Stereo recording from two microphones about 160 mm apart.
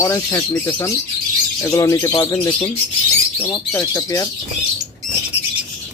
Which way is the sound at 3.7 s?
25° left (ahead or behind).